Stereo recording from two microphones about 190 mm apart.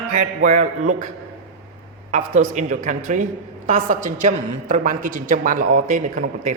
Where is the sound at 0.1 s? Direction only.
40° right (ahead or behind).